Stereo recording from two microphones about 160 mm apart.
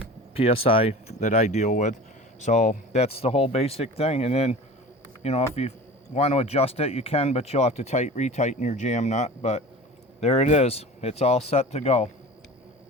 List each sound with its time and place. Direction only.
0.3 s speech: 35° left (ahead or behind)